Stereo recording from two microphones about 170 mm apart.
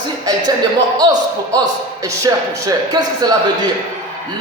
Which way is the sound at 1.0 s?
25° right (ahead or behind).